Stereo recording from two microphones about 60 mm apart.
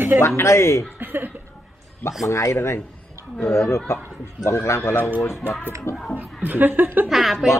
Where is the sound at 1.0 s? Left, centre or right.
Right.